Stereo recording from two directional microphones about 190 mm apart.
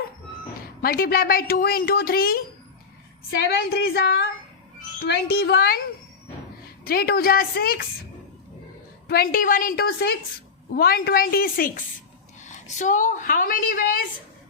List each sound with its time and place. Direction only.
0.8 s a woman's voice: 50° left (ahead or behind)
3.4 s speech: 55° left (ahead or behind)
6.8 s a woman's voice: 50° left (ahead or behind)
9.0 s a woman's voice: 50° left (ahead or behind)